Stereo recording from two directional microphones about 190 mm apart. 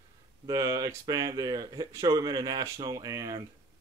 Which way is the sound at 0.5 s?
15° right (ahead or behind).